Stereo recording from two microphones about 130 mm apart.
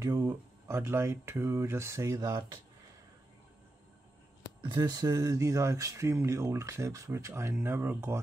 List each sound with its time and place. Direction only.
0.0 s speech: 30° right (ahead or behind)
4.6 s speech: 30° right (ahead or behind)